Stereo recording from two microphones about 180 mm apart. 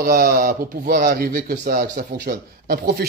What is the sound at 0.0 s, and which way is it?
Speech, 55° right (ahead or behind).